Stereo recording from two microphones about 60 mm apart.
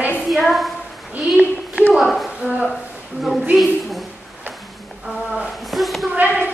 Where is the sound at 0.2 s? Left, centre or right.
Centre.